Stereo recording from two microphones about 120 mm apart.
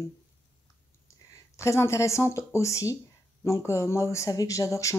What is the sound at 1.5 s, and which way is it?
Speech, 25° left (ahead or behind).